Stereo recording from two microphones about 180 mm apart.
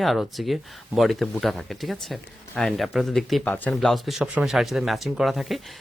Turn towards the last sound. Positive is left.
turn(degrees=0)  # may be behind; listen again after turning